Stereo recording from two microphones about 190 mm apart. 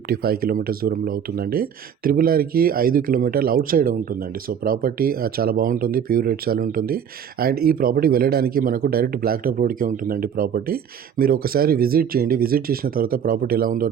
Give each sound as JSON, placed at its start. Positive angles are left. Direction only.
{"t": 0.1, "sound": "speech", "side_deg": -50}